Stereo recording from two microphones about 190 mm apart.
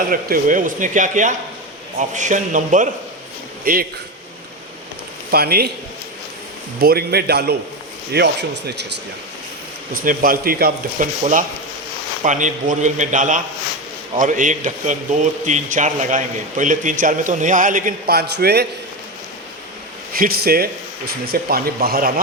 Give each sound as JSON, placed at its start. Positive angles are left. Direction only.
{"t": 0.1, "sound": "a man's voice", "side_deg": -45}
{"t": 5.3, "sound": "speech", "side_deg": -55}
{"t": 6.7, "sound": "speech", "side_deg": -55}
{"t": 9.9, "sound": "a man's voice", "side_deg": -50}
{"t": 11.2, "sound": "a man's voice", "side_deg": -40}
{"t": 20.1, "sound": "a man's voice", "side_deg": -50}